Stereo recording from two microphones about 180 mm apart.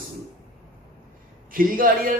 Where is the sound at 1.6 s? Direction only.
50° right (ahead or behind).